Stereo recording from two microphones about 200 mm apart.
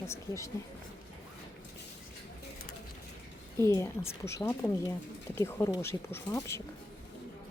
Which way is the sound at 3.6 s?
15° left (ahead or behind).